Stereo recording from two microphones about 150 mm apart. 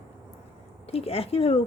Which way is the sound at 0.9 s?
40° left (ahead or behind).